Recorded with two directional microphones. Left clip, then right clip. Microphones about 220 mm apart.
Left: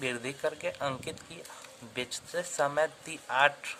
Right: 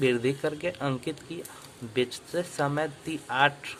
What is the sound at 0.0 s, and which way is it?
Speech, 20° left (ahead or behind).